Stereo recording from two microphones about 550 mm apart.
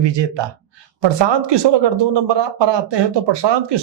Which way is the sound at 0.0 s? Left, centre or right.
Right.